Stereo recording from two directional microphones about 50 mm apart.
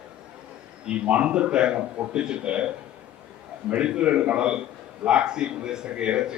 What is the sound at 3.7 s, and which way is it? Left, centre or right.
A man's voice, right.